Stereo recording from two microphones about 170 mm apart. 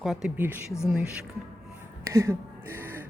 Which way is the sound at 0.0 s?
Centre (ahead or behind).